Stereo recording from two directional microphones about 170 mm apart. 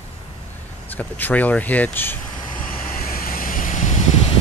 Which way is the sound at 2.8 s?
55° left (ahead or behind).